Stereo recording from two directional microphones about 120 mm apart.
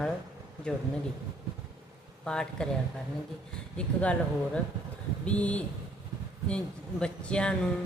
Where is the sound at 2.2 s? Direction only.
5° left (ahead or behind).